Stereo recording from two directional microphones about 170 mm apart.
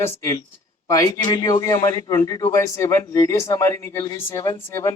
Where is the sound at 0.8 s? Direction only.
20° left (ahead or behind).